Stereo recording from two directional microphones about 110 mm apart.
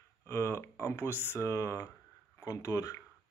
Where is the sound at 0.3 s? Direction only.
25° left (ahead or behind).